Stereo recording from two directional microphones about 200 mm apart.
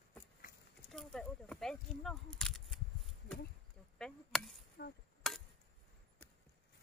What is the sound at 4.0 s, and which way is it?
Chop, centre (ahead or behind).